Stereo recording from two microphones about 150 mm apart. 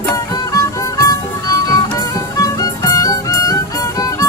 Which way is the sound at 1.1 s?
25° left (ahead or behind).